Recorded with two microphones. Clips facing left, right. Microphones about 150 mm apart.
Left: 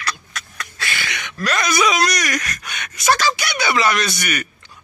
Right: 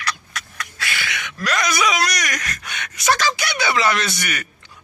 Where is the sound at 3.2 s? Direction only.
20° right (ahead or behind).